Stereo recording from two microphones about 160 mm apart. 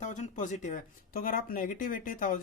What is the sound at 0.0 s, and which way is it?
Speech, 50° left (ahead or behind).